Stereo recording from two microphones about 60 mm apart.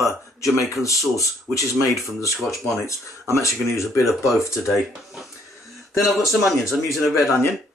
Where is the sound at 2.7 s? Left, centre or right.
Left.